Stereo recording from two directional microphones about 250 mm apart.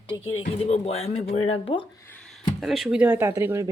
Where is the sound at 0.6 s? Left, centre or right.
Left.